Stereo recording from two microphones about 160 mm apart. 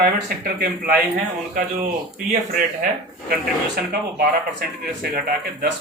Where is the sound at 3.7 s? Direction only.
70° right (ahead or behind).